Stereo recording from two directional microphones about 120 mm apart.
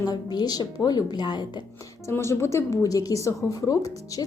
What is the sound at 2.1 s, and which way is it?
Speech, 20° left (ahead or behind).